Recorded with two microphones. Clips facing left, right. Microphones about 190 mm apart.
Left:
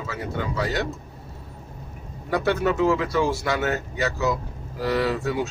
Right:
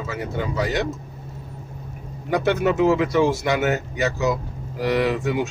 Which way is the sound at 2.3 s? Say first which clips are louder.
Right 2 dB; 20° right (ahead or behind).